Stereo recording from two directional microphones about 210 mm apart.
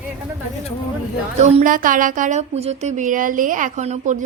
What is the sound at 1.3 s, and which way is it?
A woman's voice, 30° right (ahead or behind).